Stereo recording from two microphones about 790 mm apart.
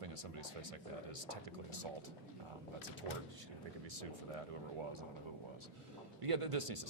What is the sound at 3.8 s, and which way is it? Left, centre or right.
Speech, right.